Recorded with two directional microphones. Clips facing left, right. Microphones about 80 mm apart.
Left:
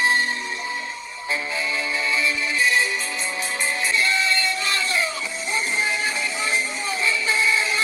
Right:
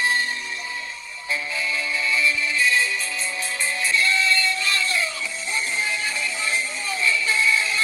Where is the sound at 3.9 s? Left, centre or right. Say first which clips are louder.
Right 2 dB; left.